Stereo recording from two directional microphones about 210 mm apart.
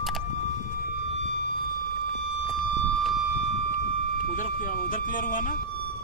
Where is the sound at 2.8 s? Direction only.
Centre (ahead or behind).